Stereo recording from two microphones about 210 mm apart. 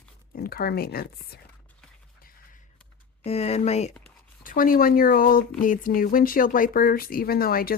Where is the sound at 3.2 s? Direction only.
30° left (ahead or behind).